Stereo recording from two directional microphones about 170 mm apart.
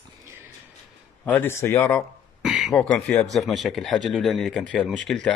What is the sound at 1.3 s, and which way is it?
Speech, 15° left (ahead or behind).